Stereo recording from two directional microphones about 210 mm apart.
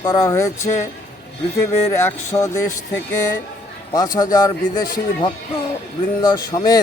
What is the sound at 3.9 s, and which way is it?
Speech, 20° left (ahead or behind).